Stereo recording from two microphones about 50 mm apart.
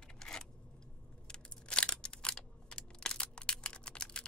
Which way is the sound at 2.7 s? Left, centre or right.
Centre.